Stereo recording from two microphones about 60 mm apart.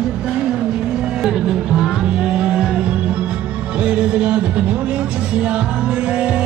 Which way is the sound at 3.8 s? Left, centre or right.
Centre.